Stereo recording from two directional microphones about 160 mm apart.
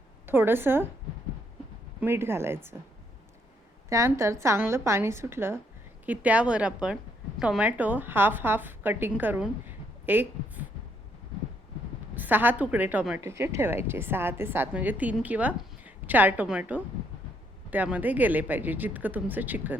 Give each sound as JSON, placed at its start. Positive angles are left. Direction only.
{"t": 0.3, "sound": "a woman's voice", "side_deg": -15}
{"t": 2.0, "sound": "a woman's voice", "side_deg": -15}
{"t": 3.8, "sound": "a woman's voice", "side_deg": -20}
{"t": 12.1, "sound": "a woman's voice", "side_deg": -10}